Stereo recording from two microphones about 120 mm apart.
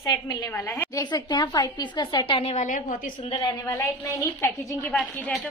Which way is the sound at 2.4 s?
75° left (ahead or behind).